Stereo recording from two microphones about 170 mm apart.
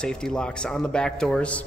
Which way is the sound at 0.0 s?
5° left (ahead or behind).